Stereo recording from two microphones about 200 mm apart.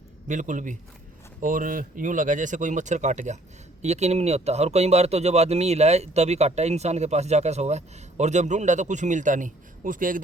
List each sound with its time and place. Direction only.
0.3 s speech: 40° right (ahead or behind)